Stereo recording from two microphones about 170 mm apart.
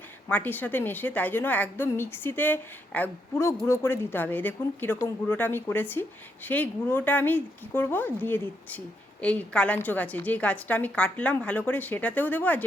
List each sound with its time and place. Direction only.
0.3 s a woman's voice: 10° left (ahead or behind)